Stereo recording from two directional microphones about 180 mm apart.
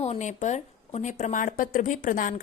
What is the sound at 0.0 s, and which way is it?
A woman's voice, 40° left (ahead or behind).